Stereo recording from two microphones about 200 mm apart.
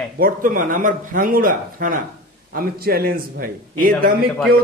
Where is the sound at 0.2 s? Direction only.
45° right (ahead or behind).